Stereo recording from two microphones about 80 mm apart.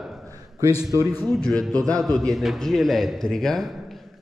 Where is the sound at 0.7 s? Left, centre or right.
Left.